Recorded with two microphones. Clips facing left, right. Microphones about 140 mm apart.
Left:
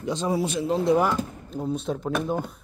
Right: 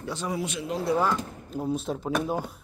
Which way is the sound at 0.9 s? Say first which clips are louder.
Left 2 dB; 15° left (ahead or behind).